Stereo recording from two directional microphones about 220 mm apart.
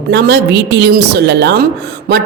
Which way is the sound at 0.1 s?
50° right (ahead or behind).